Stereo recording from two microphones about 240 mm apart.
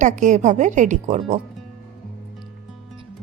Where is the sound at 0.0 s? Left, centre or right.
Right.